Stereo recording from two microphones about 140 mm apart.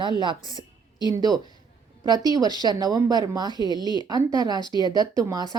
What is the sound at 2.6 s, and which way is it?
A woman's voice, 30° right (ahead or behind).